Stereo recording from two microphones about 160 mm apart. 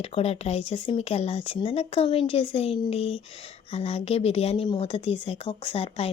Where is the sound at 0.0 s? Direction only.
40° left (ahead or behind).